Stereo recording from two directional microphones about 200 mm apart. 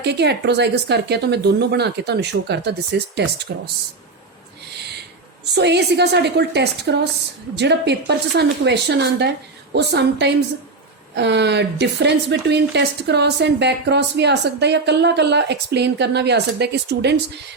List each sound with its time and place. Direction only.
0.0 s a woman's voice: 55° right (ahead or behind)
5.5 s a woman's voice: 60° right (ahead or behind)